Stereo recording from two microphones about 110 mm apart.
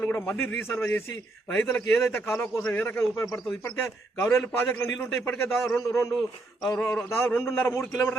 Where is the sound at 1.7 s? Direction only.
20° left (ahead or behind).